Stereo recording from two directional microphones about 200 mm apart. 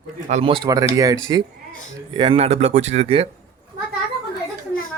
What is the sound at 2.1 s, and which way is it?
Speech, 25° right (ahead or behind).